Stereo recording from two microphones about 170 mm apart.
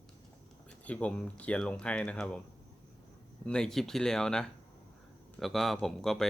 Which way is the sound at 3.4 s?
5° left (ahead or behind).